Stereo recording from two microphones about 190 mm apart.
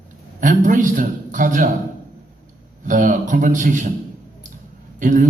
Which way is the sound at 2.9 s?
45° right (ahead or behind).